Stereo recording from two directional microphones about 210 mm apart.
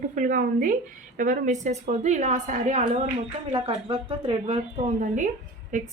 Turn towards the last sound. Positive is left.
turn(degrees=-35)  # may be behind; listen again after turning